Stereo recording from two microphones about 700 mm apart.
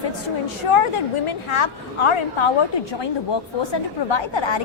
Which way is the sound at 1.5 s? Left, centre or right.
Left.